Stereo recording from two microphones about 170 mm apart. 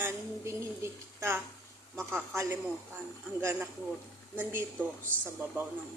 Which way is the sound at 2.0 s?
15° right (ahead or behind).